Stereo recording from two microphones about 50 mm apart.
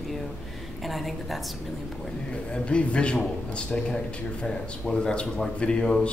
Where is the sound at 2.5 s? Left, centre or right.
Left.